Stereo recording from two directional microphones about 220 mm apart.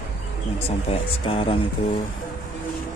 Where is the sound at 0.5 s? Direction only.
25° left (ahead or behind).